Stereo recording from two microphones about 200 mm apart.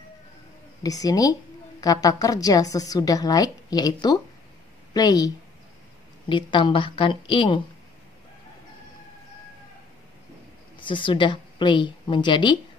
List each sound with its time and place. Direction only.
0.8 s a woman's voice: 20° left (ahead or behind)
10.8 s a woman's voice: 25° left (ahead or behind)